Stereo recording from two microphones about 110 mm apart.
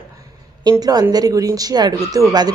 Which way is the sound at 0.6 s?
35° right (ahead or behind).